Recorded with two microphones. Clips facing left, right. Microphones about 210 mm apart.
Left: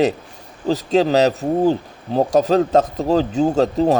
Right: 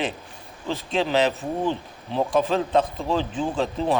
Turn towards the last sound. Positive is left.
turn(degrees=45)  # may be behind; listen again after turning